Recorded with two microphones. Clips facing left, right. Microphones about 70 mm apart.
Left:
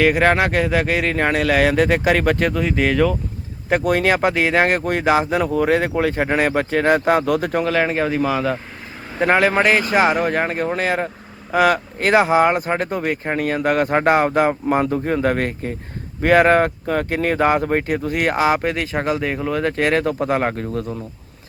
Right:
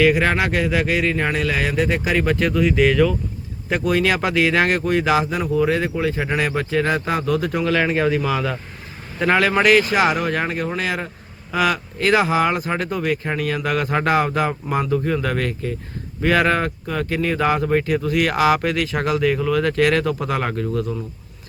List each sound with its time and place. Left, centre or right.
0.0 s speech: left
5.4 s speech: left
7.7 s speech: left